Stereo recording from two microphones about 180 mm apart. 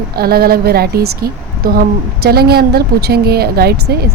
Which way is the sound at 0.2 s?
55° right (ahead or behind).